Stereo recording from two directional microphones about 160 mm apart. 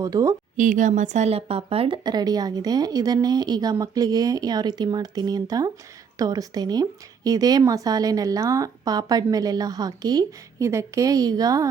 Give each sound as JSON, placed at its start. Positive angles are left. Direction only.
{"t": 0.0, "sound": "speech", "side_deg": -20}
{"t": 0.5, "sound": "speech", "side_deg": -55}